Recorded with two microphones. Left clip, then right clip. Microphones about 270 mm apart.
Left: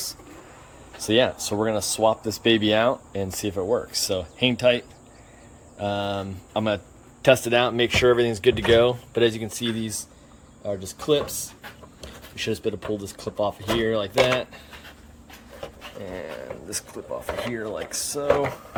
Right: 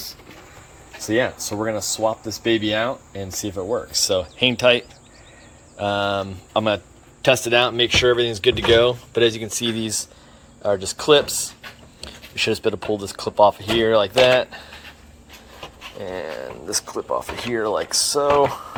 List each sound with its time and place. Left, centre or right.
1.0 s speech: centre
1.5 s speech: centre
2.3 s speech: centre
3.4 s speech: centre
16.0 s speech: centre